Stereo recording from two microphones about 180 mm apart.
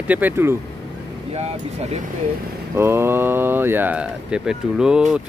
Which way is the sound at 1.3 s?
35° right (ahead or behind).